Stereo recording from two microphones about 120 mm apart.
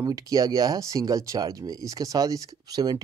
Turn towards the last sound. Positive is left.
turn(degrees=-30)  # may be behind; listen again after turning